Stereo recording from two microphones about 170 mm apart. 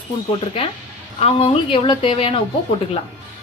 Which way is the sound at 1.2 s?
35° left (ahead or behind).